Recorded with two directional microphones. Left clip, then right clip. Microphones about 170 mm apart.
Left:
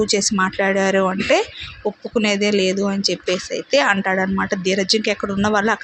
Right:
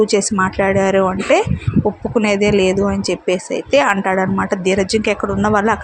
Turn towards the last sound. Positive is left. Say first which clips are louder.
# right 3 dB
turn(degrees=-15)  # may be behind; listen again after turning